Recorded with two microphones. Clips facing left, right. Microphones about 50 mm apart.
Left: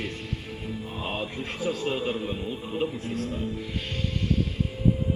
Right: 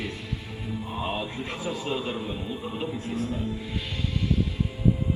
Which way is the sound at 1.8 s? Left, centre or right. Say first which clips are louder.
Left 2 dB; left.